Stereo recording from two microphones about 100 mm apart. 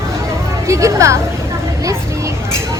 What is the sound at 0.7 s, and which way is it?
Speech, 30° right (ahead or behind).